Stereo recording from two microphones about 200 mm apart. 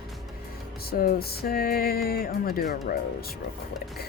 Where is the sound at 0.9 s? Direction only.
45° left (ahead or behind).